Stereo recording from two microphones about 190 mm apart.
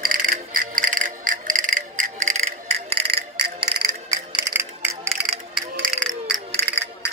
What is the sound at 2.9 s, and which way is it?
Cricket, 30° right (ahead or behind).